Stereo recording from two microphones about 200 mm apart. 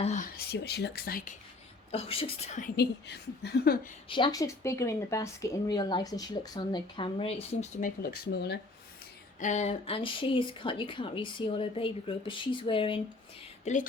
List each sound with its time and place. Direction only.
0.0 s speech: 40° left (ahead or behind)
1.9 s speech: 30° left (ahead or behind)
2.6 s a woman's voice: 55° left (ahead or behind)
4.1 s speech: 20° left (ahead or behind)
7.8 s a woman's voice: 45° left (ahead or behind)
9.4 s speech: 35° left (ahead or behind)
13.7 s a sound: 35° left (ahead or behind)